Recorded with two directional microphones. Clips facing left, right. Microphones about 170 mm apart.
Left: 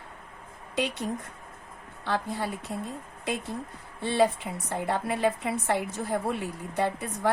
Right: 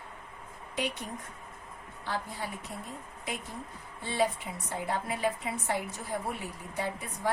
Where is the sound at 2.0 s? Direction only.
70° left (ahead or behind).